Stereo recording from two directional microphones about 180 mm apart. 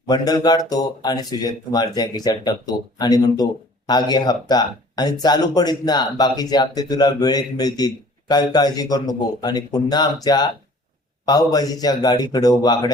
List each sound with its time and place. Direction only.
0.1 s speech: 20° left (ahead or behind)